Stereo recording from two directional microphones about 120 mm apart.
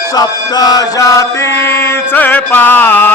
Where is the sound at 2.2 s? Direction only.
15° left (ahead or behind).